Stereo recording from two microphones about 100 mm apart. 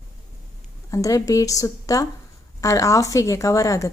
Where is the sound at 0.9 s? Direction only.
35° left (ahead or behind).